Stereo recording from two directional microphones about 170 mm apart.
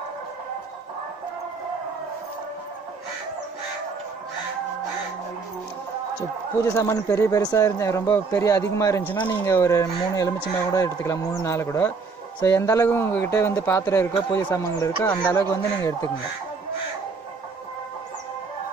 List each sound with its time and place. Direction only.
6.6 s a man's voice: 15° left (ahead or behind)